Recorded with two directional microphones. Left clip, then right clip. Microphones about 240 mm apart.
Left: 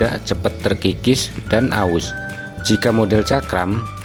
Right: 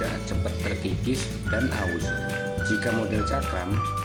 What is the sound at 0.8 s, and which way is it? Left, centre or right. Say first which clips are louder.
Speech: left 11 dB; left.